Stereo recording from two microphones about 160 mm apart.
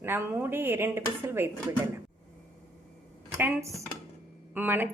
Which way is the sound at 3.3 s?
20° right (ahead or behind).